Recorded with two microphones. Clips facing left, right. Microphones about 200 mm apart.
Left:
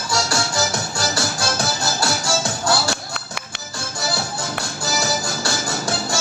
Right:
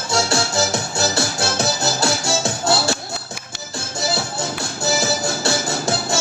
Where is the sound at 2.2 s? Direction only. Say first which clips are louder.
Right 1 dB; 25° right (ahead or behind).